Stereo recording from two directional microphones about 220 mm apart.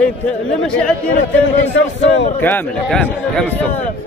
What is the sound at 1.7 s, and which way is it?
Speech, 55° left (ahead or behind).